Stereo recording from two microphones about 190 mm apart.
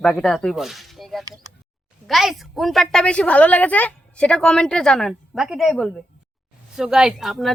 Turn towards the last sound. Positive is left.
turn(degrees=0)  # may be behind; listen again after turning